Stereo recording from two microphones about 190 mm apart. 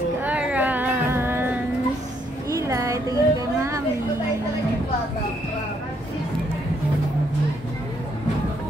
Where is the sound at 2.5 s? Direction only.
15° right (ahead or behind).